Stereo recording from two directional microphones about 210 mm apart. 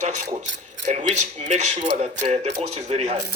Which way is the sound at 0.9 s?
35° right (ahead or behind).